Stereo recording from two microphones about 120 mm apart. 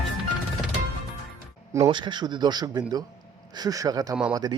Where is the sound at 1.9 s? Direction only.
40° right (ahead or behind).